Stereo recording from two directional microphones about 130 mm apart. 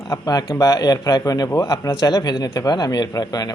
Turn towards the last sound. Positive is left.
turn(degrees=30)  # may be behind; listen again after turning